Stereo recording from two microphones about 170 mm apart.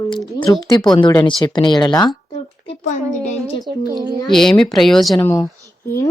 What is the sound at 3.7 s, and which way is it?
Speech, 25° right (ahead or behind).